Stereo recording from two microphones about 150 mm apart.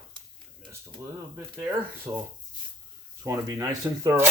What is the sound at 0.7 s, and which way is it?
Speech, 20° right (ahead or behind).